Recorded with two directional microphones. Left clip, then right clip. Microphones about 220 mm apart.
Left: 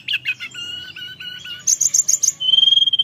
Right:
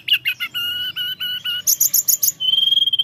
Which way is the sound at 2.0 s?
25° right (ahead or behind).